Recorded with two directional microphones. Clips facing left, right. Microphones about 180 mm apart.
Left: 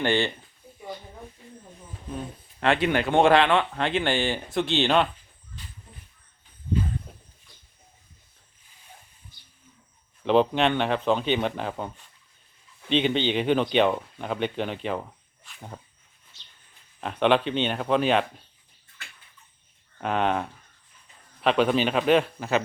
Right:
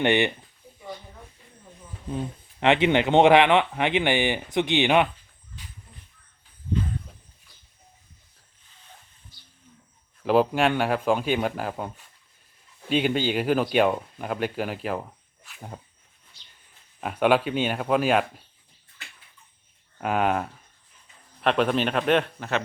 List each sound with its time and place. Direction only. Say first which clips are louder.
0.0 s speech: right 3 dB; 20° right (ahead or behind)
2.1 s speech: right 4 dB; 20° right (ahead or behind)
10.2 s speech: even; 5° right (ahead or behind)
17.0 s speech: right 1 dB; 5° right (ahead or behind)
20.0 s speech: right 1 dB; 5° right (ahead or behind)